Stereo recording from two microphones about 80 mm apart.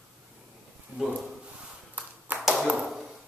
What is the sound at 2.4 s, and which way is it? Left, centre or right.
Tap, centre.